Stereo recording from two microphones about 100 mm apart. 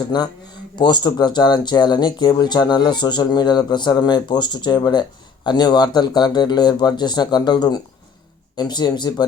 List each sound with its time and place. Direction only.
0.1 s speech: 45° left (ahead or behind)